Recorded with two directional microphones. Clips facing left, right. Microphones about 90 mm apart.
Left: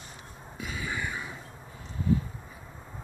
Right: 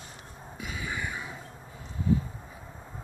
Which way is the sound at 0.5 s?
10° right (ahead or behind).